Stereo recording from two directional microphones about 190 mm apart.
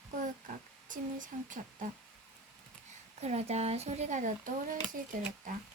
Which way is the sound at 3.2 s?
35° right (ahead or behind).